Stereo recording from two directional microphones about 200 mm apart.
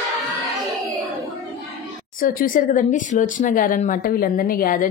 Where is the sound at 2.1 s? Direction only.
45° left (ahead or behind).